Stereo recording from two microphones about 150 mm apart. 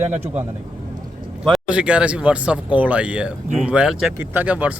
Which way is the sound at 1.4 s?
5° right (ahead or behind).